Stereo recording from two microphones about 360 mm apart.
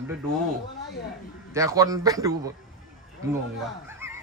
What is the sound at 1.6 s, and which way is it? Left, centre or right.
Speech, centre.